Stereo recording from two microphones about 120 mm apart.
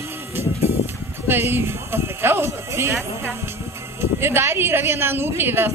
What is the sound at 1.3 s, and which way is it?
Speech, 20° right (ahead or behind).